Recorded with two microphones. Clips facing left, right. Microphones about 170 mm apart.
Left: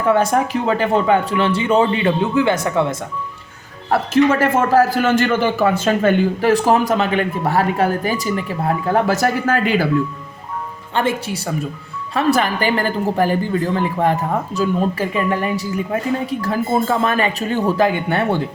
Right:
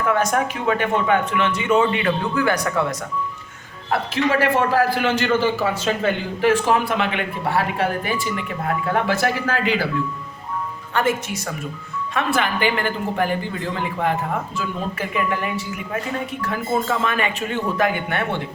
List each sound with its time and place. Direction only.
0.0 s speech: 30° left (ahead or behind)
4.1 s a man's voice: 45° left (ahead or behind)
10.9 s speech: 30° left (ahead or behind)
12.1 s speech: 40° left (ahead or behind)
14.5 s speech: 35° left (ahead or behind)